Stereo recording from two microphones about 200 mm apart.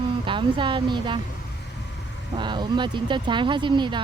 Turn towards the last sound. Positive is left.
turn(degrees=-25)  # may be behind; listen again after turning